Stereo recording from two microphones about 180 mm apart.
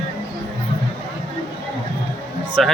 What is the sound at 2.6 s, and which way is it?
Speech, centre (ahead or behind).